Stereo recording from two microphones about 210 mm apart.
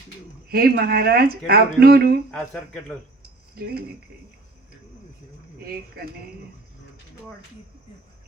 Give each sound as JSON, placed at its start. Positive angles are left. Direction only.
{"t": 0.4, "sound": "speech", "side_deg": -45}
{"t": 3.5, "sound": "speech", "side_deg": -45}